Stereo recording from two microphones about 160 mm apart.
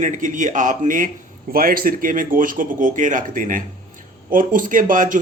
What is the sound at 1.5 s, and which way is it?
A man's voice, 65° right (ahead or behind).